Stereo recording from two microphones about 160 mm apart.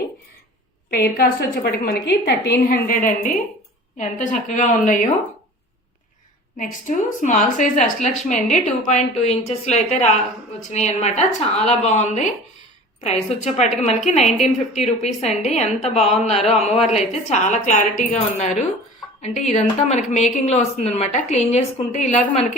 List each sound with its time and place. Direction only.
0.9 s a woman's voice: 70° left (ahead or behind); by 5.0 s 55° left (ahead or behind)
6.6 s speech: 50° left (ahead or behind)